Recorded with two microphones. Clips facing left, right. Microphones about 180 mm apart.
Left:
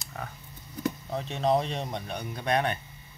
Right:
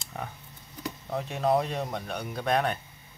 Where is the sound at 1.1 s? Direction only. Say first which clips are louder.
Right 1 dB; 10° right (ahead or behind).